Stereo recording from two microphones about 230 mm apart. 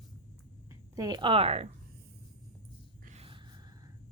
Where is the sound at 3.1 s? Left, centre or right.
Right.